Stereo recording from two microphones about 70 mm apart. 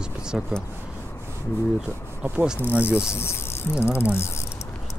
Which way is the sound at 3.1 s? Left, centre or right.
Left.